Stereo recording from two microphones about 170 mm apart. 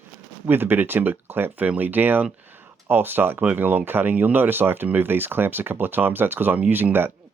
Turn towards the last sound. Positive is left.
turn(degrees=-10)  # may be behind; listen again after turning